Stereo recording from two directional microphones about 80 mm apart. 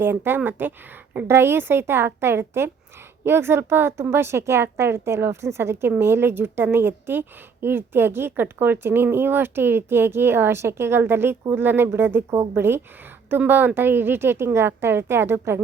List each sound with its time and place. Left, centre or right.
0.0 s a woman's voice: right